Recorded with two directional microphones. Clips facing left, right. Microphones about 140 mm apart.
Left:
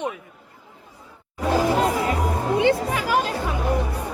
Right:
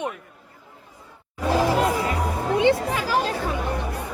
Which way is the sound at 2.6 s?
20° right (ahead or behind).